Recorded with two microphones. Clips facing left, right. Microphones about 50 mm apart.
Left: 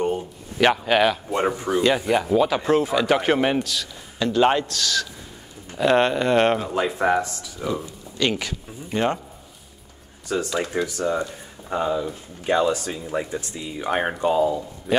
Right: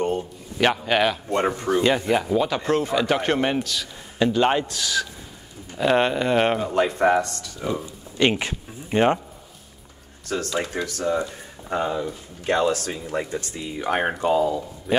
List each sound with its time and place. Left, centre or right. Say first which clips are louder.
0.0 s a man's voice: even; centre
7.6 s a man's voice: even; centre
8.2 s speech: right 3 dB; right
10.2 s speech: left 1 dB; centre